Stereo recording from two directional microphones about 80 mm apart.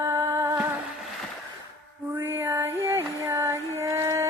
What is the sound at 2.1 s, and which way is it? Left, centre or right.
Female singing, right.